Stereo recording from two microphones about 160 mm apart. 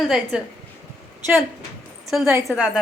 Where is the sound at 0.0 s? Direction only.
5° right (ahead or behind).